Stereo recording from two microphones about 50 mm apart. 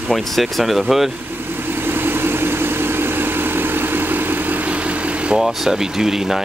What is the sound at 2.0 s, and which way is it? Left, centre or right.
Vehicle, right.